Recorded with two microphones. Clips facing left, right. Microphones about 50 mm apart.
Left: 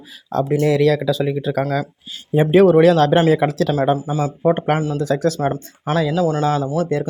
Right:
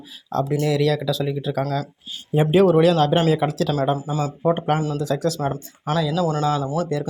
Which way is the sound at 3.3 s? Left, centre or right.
Left.